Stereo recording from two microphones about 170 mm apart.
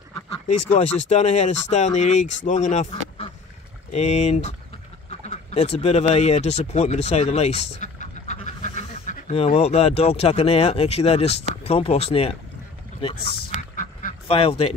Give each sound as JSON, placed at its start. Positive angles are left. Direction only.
{"t": 0.7, "sound": "speech", "side_deg": 40}
{"t": 3.9, "sound": "speech", "side_deg": 40}
{"t": 13.6, "sound": "duck", "side_deg": 50}
{"t": 14.2, "sound": "speech", "side_deg": 35}